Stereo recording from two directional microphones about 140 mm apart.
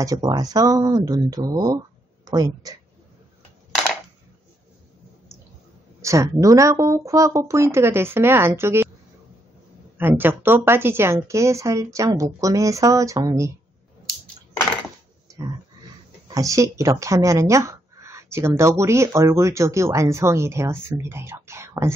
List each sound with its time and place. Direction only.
0.0 s speech: 25° right (ahead or behind)
5.9 s speech: 20° right (ahead or behind)
9.9 s a woman's voice: 15° right (ahead or behind)
15.2 s grunt: 25° right (ahead or behind)
16.3 s speech: 25° right (ahead or behind)